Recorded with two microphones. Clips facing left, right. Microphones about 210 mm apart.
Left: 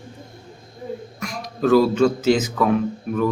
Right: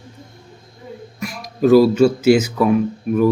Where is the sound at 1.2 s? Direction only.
5° right (ahead or behind).